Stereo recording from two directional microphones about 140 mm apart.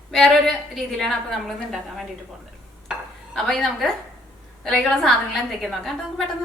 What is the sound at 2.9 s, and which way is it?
Dishes, centre (ahead or behind).